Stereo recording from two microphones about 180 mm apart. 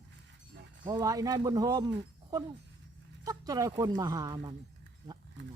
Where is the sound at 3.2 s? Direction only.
20° right (ahead or behind).